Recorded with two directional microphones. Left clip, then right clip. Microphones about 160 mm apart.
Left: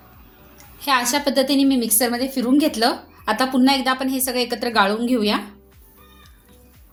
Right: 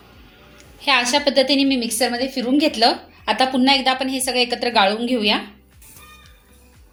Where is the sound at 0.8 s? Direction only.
50° left (ahead or behind).